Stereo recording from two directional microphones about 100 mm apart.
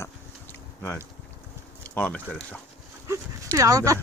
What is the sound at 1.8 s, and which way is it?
Speech, 15° left (ahead or behind).